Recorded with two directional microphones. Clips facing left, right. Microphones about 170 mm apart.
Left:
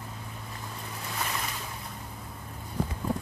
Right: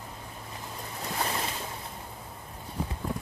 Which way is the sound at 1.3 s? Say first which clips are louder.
Right 2 dB; 30° right (ahead or behind).